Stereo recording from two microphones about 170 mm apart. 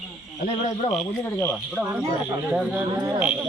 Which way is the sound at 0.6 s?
40° left (ahead or behind).